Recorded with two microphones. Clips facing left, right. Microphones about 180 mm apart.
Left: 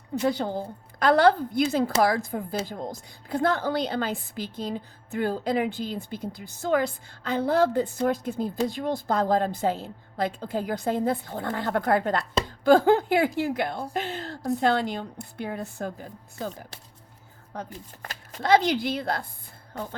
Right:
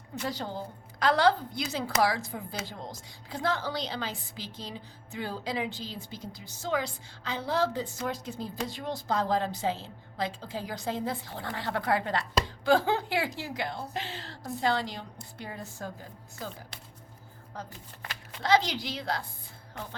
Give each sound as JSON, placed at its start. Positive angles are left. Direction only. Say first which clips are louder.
{"t": 0.3, "sound": "a woman's voice", "louder": "left 8 dB", "side_deg": 55}
{"t": 18.0, "sound": "a woman's voice", "louder": "left 4 dB", "side_deg": 45}
{"t": 19.7, "sound": "a sound", "louder": "left 6 dB", "side_deg": 40}